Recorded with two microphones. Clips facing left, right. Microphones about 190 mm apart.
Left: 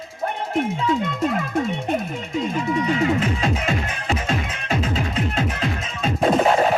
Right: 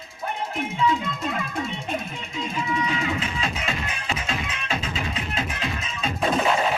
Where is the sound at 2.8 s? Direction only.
50° left (ahead or behind).